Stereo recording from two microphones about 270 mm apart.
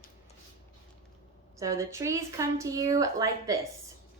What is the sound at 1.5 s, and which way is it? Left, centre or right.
A woman's voice, centre.